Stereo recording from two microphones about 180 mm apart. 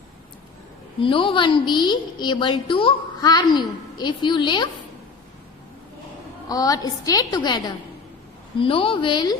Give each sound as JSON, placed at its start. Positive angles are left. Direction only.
{"t": 0.9, "sound": "a woman's voice", "side_deg": 30}
{"t": 6.5, "sound": "a woman's voice", "side_deg": 20}